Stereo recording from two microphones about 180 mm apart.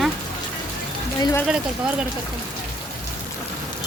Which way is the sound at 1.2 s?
15° left (ahead or behind).